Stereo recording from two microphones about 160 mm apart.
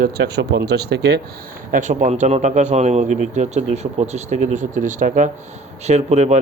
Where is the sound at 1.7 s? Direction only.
50° right (ahead or behind).